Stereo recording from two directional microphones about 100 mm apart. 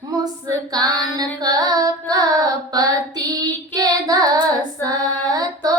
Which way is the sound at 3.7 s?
40° right (ahead or behind).